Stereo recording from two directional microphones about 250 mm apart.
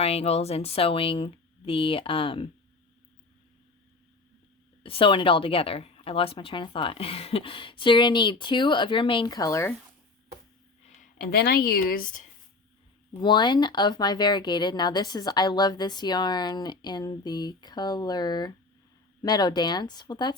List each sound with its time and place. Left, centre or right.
0.0 s a woman's voice: left
4.8 s a woman's voice: left
11.2 s speech: left
13.2 s speech: centre